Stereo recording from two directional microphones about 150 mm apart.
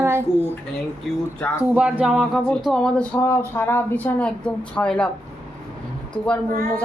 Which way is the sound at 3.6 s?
15° left (ahead or behind).